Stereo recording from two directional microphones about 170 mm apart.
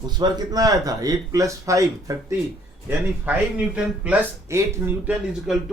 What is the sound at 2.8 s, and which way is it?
A man's voice, 10° right (ahead or behind).